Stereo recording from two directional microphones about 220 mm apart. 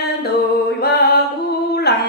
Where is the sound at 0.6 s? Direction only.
45° left (ahead or behind).